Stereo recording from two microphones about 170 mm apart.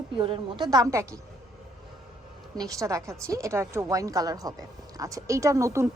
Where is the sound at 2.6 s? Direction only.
20° right (ahead or behind).